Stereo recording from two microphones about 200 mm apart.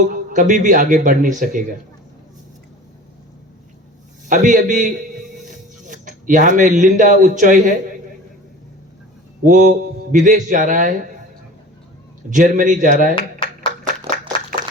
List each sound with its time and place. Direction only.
0.1 s a man's voice: 40° right (ahead or behind)
4.3 s a man's voice: 40° right (ahead or behind)
9.4 s a man's voice: 40° right (ahead or behind)
12.3 s a man's voice: 40° right (ahead or behind)
13.1 s a sound: 25° left (ahead or behind)